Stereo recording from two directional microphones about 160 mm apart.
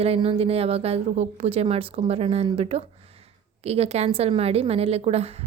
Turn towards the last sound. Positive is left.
turn(degrees=-40)  # may be behind; listen again after turning